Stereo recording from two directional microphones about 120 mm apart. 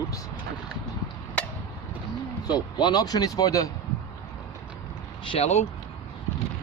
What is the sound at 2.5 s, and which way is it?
Speech, 35° left (ahead or behind).